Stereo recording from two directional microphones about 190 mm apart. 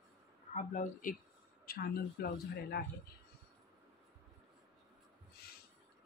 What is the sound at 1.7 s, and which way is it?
Speech, 55° left (ahead or behind).